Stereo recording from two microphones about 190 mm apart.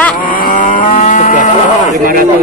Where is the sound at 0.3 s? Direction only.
50° left (ahead or behind).